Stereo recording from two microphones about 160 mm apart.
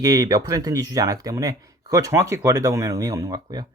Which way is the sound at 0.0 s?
25° right (ahead or behind).